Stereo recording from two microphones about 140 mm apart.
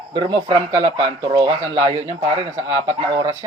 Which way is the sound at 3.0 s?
25° right (ahead or behind).